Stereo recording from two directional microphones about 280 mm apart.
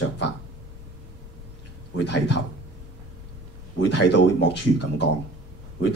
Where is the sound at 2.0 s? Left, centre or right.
Left.